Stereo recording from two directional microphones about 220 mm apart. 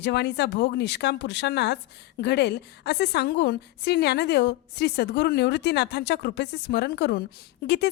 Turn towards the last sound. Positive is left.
turn(degrees=50)  # may be behind; listen again after turning